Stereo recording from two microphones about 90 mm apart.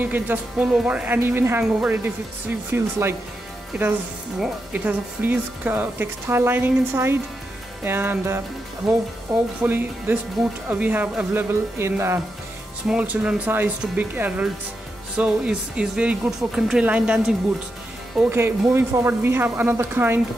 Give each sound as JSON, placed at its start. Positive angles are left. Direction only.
{"t": 0.0, "sound": "speech", "side_deg": -20}
{"t": 2.7, "sound": "speech", "side_deg": -25}
{"t": 4.7, "sound": "speech", "side_deg": -20}
{"t": 9.6, "sound": "speech", "side_deg": -20}
{"t": 12.8, "sound": "speech", "side_deg": -15}
{"t": 18.3, "sound": "speech", "side_deg": -25}